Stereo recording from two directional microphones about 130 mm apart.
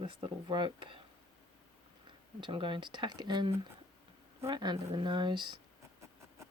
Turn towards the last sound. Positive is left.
turn(degrees=-35)  # may be behind; listen again after turning